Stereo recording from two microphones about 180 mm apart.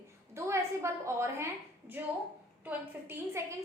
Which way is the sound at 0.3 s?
15° right (ahead or behind).